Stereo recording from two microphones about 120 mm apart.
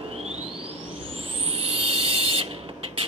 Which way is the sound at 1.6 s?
50° right (ahead or behind).